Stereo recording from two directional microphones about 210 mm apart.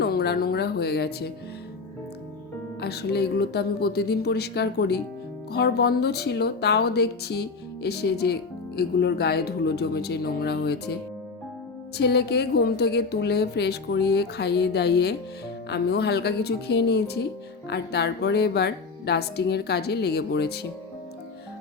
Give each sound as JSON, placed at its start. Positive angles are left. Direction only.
{"t": 0.0, "sound": "a woman's voice", "side_deg": 50}
{"t": 2.8, "sound": "speech", "side_deg": 50}
{"t": 11.9, "sound": "speech", "side_deg": 50}